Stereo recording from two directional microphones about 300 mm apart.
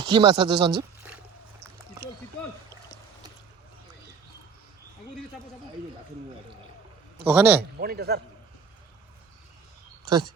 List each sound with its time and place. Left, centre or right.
0.0 s speech: centre
7.3 s a man's voice: centre
7.8 s a man's voice: right
10.1 s speech: centre